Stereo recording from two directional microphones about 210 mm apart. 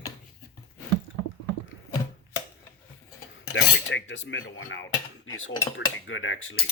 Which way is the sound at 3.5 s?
60° left (ahead or behind).